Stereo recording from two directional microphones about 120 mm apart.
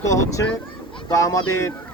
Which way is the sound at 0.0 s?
25° left (ahead or behind).